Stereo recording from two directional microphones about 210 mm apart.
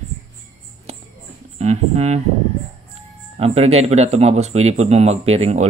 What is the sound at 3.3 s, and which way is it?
Speech, 30° right (ahead or behind).